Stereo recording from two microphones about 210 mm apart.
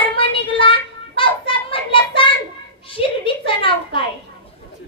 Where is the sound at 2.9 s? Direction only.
25° left (ahead or behind).